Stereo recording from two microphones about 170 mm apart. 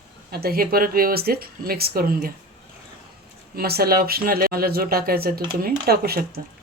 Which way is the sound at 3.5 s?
65° right (ahead or behind).